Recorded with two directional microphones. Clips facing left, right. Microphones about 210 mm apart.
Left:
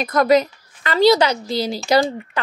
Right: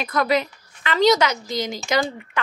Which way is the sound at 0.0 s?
40° left (ahead or behind).